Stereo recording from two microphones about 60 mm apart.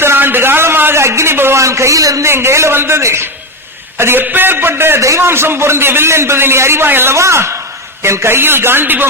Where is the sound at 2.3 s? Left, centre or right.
Right.